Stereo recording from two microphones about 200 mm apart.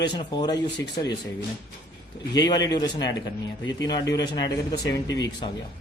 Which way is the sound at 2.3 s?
20° left (ahead or behind).